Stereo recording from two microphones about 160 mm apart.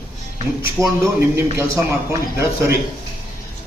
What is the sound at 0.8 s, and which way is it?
Speech, 20° right (ahead or behind).